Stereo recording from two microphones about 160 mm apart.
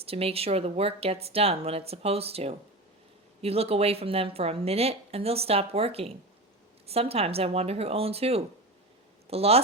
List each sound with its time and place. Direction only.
0.0 s a woman's voice: 40° right (ahead or behind)